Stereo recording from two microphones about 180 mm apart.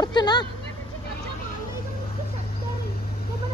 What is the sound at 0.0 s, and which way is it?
Vehicle, 25° left (ahead or behind).